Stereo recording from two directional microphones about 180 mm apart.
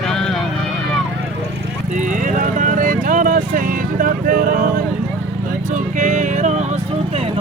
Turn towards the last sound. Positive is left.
turn(degrees=-40)  # may be behind; listen again after turning